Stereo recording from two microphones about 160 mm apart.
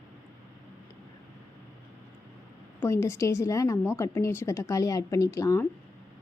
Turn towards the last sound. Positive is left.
turn(degrees=20)  # may be behind; listen again after turning